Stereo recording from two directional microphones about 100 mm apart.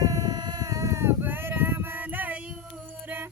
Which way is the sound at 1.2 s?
20° right (ahead or behind).